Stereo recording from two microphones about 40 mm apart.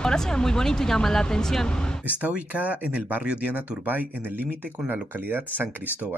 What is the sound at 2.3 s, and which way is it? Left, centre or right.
Speech, right.